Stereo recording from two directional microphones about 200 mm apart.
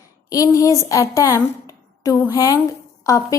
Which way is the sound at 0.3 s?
15° left (ahead or behind).